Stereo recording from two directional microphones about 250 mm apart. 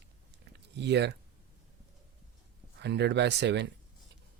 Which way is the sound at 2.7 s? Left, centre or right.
Right.